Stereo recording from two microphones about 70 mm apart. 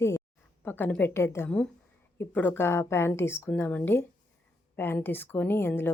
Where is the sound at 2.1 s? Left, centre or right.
Left.